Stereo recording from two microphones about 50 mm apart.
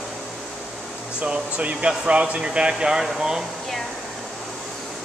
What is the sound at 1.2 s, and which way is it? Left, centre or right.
Speech, centre.